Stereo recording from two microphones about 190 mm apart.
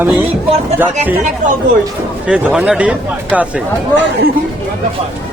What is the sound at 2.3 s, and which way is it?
Speech, 5° right (ahead or behind).